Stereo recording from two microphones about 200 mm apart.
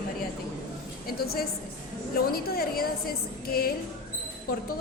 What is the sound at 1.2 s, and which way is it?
A woman's voice, 50° left (ahead or behind).